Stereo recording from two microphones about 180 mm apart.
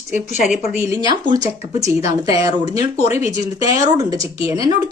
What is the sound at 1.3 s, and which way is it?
Speech, 20° right (ahead or behind).